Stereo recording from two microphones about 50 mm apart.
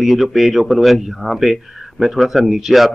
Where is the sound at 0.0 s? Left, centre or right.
Centre.